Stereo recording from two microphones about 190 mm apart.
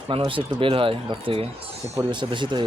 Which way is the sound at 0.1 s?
30° right (ahead or behind).